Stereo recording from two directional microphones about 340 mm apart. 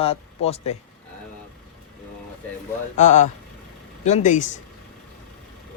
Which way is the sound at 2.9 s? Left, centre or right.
Left.